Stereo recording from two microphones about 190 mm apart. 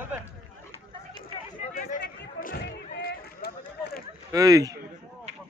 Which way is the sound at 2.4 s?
55° left (ahead or behind).